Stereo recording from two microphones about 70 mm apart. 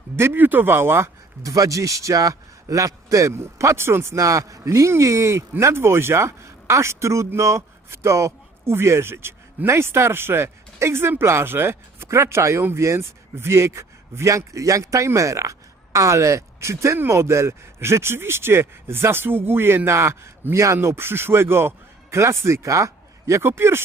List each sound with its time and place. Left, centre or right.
0.2 s speech: right